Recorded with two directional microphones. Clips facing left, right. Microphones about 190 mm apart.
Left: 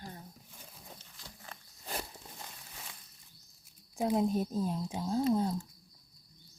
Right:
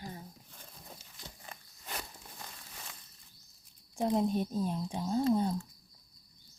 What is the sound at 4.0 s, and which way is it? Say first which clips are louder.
Speech: even; 5° left (ahead or behind).